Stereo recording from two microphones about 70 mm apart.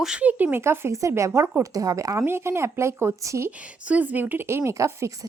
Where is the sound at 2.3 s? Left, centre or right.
Right.